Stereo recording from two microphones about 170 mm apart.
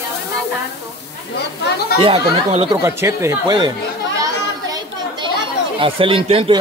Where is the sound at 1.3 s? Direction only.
70° left (ahead or behind).